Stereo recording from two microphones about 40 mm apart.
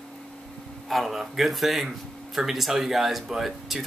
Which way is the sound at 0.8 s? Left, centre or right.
Centre.